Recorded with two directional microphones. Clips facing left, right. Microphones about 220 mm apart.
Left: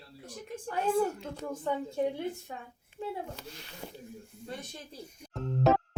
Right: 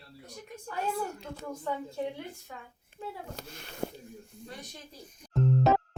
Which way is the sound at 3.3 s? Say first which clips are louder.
Right 1 dB; 50° right (ahead or behind).